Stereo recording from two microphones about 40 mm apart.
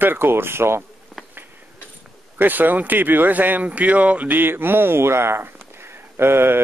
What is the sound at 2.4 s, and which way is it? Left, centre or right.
Speech, right.